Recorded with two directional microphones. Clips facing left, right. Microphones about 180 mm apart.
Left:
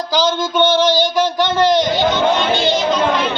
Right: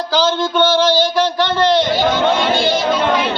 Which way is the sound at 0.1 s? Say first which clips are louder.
Right 1 dB; 15° left (ahead or behind).